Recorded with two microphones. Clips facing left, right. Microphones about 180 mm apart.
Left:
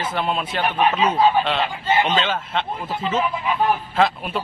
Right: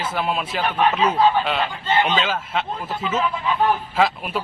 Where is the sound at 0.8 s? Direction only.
10° left (ahead or behind).